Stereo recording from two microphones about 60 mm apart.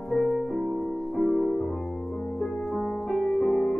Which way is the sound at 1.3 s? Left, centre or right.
Centre.